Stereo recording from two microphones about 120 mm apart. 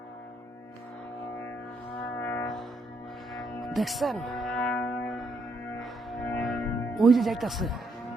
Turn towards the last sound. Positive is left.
turn(degrees=0)  # may be behind; listen again after turning